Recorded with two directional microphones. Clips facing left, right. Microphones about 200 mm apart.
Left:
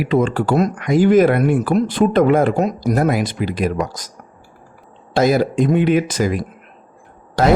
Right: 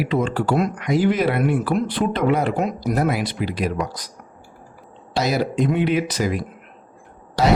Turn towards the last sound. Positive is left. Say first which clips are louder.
# left 4 dB
turn(degrees=50)  # may be behind; listen again after turning